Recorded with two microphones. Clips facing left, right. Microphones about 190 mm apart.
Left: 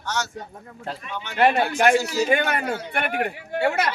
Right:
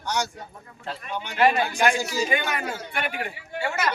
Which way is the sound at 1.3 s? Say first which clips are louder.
Left 2 dB; 60° left (ahead or behind).